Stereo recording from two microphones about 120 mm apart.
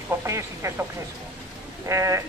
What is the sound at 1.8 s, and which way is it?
Speech, 25° right (ahead or behind).